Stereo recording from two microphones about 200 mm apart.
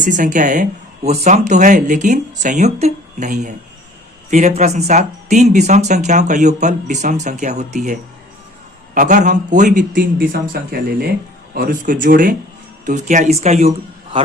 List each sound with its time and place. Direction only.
0.0 s speech: 40° right (ahead or behind)
9.0 s a man's voice: 40° right (ahead or behind)